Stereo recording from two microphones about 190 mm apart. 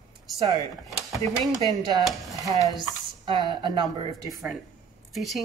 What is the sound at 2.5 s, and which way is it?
A woman's voice, 20° right (ahead or behind).